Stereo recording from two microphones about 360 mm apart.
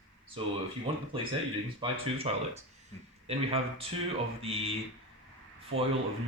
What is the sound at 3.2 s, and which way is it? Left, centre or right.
A man's voice, centre.